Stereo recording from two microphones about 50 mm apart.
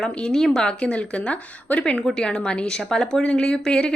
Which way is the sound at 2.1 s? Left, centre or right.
Centre.